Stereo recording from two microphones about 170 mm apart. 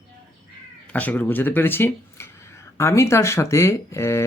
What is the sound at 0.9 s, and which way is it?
Speech, 10° left (ahead or behind).